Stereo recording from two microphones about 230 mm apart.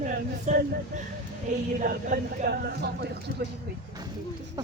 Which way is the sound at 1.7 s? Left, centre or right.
Right.